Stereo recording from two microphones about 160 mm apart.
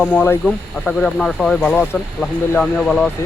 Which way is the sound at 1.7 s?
15° left (ahead or behind).